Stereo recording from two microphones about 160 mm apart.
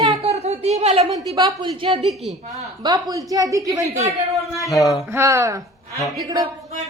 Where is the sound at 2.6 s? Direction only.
20° right (ahead or behind).